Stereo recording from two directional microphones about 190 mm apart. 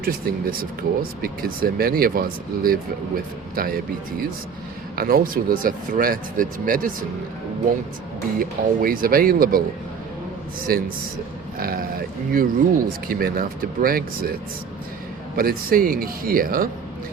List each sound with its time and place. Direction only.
0.0 s speech: 50° right (ahead or behind)
8.4 s speech: 50° right (ahead or behind)
10.7 s speech: 50° right (ahead or behind)
15.4 s speech: 50° right (ahead or behind)